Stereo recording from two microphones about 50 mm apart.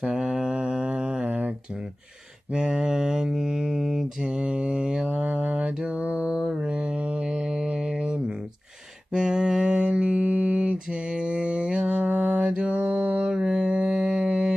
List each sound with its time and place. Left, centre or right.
0.0 s mantra: centre
2.5 s speech: centre
4.2 s mantra: centre
5.0 s mantra: right
13.4 s mantra: centre